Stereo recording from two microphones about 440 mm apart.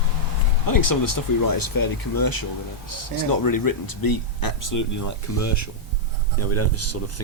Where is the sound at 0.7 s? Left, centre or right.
Left.